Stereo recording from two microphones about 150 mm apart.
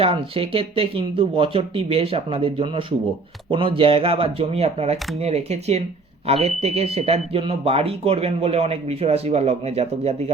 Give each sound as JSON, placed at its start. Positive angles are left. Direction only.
{"t": 0.0, "sound": "speech", "side_deg": -40}